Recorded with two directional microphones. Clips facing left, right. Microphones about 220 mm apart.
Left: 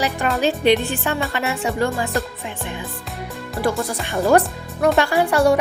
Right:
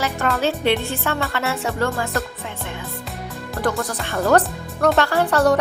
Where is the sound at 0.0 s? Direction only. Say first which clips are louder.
Left 1 dB; 15° left (ahead or behind).